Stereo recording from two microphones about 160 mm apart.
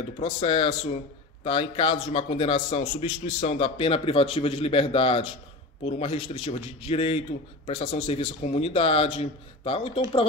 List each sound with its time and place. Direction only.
0.2 s a man's voice: 35° left (ahead or behind)